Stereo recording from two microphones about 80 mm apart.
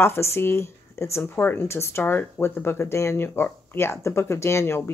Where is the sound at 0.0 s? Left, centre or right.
Left.